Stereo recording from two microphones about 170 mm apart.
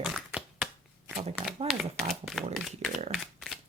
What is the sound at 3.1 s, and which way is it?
Shuffling cards, centre (ahead or behind).